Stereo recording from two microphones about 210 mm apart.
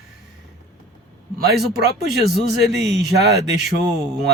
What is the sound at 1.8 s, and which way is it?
Speech, 50° right (ahead or behind).